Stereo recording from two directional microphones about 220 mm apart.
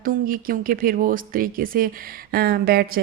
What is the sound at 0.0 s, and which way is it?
Speech, 40° right (ahead or behind).